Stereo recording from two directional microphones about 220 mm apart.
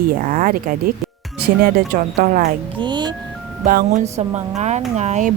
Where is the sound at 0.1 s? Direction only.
40° right (ahead or behind).